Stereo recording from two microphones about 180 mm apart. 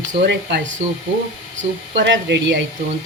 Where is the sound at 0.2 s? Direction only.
70° right (ahead or behind).